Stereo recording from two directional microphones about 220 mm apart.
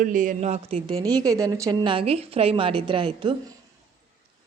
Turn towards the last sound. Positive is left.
turn(degrees=-20)  # may be behind; listen again after turning